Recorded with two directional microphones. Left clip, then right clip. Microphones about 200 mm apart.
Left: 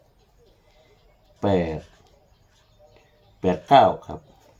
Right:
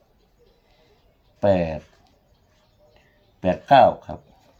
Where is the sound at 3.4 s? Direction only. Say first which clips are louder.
Right 1 dB; 55° right (ahead or behind).